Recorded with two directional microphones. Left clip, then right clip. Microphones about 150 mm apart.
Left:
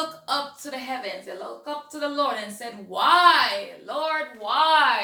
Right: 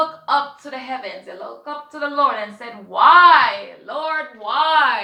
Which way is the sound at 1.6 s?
30° left (ahead or behind).